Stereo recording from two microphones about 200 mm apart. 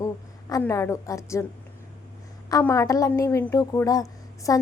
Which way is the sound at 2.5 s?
15° left (ahead or behind).